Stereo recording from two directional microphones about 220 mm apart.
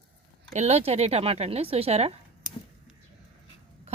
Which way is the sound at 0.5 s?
30° right (ahead or behind).